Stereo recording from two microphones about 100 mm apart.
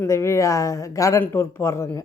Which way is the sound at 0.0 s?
30° left (ahead or behind).